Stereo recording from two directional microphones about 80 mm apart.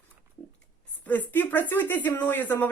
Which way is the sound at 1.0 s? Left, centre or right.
Left.